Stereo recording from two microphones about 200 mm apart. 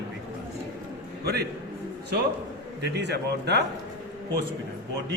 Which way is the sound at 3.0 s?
55° right (ahead or behind).